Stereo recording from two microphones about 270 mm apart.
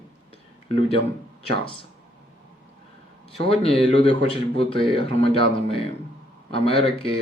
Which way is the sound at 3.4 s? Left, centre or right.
Left.